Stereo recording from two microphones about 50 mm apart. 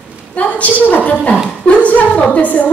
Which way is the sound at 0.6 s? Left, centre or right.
Left.